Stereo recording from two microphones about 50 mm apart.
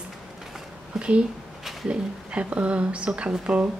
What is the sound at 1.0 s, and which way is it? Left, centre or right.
Speech, right.